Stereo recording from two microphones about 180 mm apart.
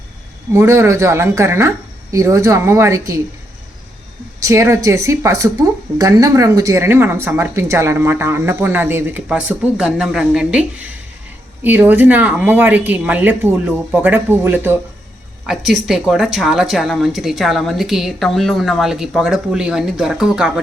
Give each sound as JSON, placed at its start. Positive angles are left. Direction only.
{"t": 0.5, "sound": "speech", "side_deg": -15}
{"t": 4.4, "sound": "speech", "side_deg": -15}
{"t": 15.9, "sound": "speech", "side_deg": 0}